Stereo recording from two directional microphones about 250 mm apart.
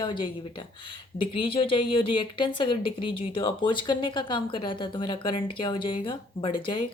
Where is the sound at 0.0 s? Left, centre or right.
Centre.